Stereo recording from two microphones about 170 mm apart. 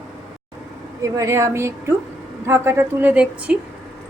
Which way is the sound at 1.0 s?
20° right (ahead or behind).